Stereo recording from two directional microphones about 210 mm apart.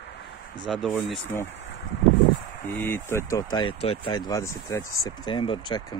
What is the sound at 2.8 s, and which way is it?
Speech, 10° left (ahead or behind).